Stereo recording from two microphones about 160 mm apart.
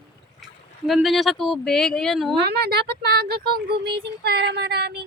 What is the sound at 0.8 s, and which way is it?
Speech, centre (ahead or behind).